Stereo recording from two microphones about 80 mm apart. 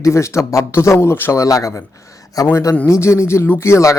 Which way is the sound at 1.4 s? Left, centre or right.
Left.